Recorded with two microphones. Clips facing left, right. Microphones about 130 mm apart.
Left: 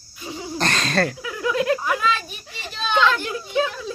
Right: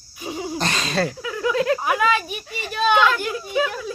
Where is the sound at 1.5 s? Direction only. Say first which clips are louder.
Even; 20° left (ahead or behind).